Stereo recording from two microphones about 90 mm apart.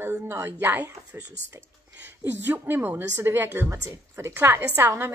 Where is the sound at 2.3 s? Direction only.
25° right (ahead or behind).